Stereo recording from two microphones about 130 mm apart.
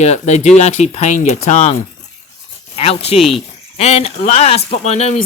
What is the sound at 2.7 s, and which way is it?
Speech, 50° left (ahead or behind).